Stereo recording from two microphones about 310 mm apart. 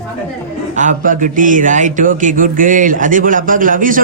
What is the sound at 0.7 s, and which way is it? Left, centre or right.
A man's voice, right.